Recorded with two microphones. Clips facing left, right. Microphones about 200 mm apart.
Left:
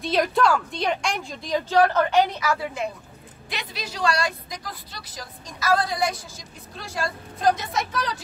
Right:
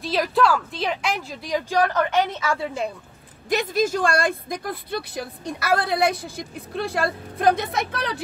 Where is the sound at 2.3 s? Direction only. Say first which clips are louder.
Right 1 dB; 25° right (ahead or behind).